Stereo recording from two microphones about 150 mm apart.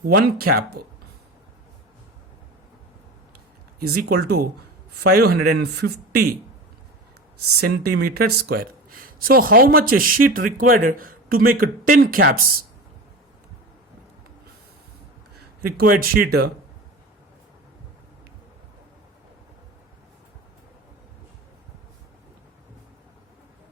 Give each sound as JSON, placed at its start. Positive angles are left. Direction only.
{"t": 0.0, "sound": "speech", "side_deg": -80}
{"t": 3.8, "sound": "speech", "side_deg": -90}
{"t": 7.6, "sound": "speech", "side_deg": -90}
{"t": 15.6, "sound": "speech", "side_deg": -85}